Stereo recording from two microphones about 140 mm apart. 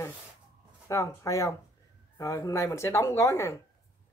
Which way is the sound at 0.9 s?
20° left (ahead or behind).